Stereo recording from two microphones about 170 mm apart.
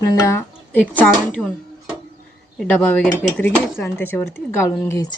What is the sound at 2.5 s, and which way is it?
Speech, 5° left (ahead or behind).